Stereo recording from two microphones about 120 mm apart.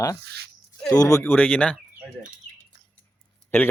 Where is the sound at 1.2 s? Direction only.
10° left (ahead or behind).